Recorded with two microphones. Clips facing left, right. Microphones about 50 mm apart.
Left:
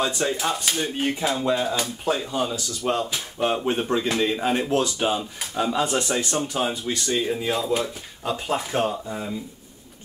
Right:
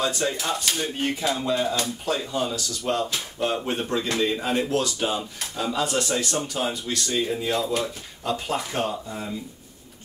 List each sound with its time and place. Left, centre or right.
0.0 s speech: left
0.5 s speech: centre